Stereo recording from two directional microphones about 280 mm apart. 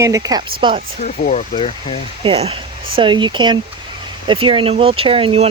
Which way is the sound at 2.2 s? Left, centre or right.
Centre.